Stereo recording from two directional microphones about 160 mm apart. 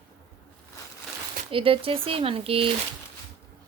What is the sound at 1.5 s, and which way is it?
A woman's voice, 35° right (ahead or behind).